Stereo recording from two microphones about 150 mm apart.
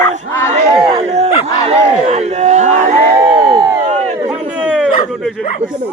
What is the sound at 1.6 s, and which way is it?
Crowd, 45° right (ahead or behind).